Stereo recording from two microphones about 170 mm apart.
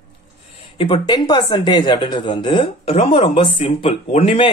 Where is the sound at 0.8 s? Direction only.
25° left (ahead or behind).